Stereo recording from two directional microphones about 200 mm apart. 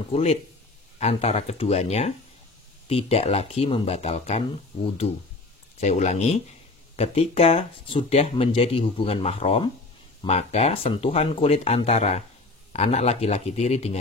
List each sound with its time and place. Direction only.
0.1 s speech: 30° left (ahead or behind)